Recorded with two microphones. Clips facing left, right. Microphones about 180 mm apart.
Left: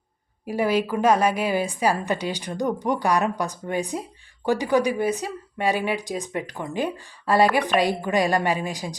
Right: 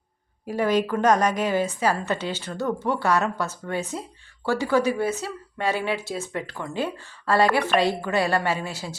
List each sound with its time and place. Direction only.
0.4 s a woman's voice: 10° left (ahead or behind)